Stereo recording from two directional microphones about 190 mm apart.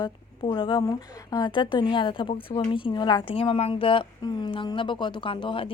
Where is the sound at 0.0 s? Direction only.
25° left (ahead or behind).